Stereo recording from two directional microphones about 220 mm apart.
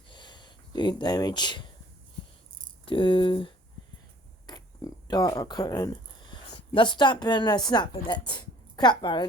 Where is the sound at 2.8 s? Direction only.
25° left (ahead or behind).